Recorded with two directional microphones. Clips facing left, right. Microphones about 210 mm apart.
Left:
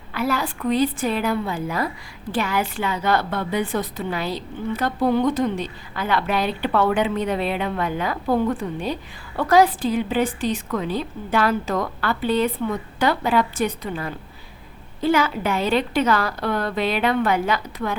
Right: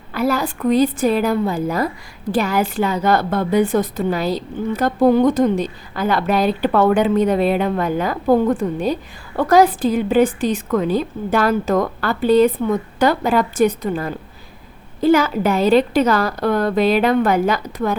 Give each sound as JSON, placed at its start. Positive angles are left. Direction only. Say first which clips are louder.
{"t": 0.1, "sound": "a woman's voice", "louder": "right 5 dB", "side_deg": -40}